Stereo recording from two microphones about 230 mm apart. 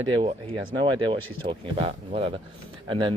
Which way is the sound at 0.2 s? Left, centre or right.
Right.